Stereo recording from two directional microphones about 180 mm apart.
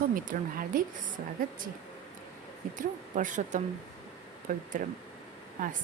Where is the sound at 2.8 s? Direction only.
45° right (ahead or behind).